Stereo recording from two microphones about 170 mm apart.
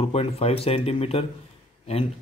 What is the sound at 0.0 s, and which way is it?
Speech, 35° left (ahead or behind).